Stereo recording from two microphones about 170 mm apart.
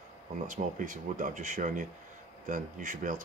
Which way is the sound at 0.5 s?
50° right (ahead or behind).